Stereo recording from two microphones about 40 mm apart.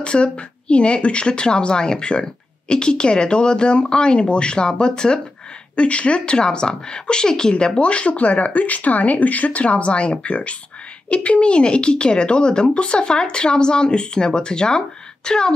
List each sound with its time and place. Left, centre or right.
0.0 s speech: left